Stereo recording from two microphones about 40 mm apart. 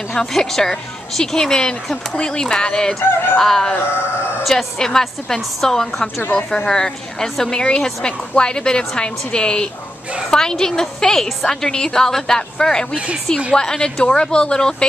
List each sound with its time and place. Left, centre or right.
0.1 s a woman's voice: centre
2.9 s a woman's voice: centre
4.7 s a woman's voice: centre
12.9 s speech: right
13.6 s a woman's voice: centre